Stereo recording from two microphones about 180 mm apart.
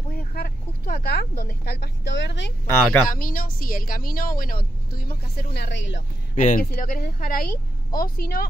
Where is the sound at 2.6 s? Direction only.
10° left (ahead or behind).